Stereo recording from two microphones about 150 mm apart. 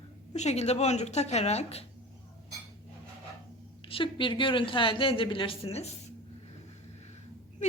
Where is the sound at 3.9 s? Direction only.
35° left (ahead or behind).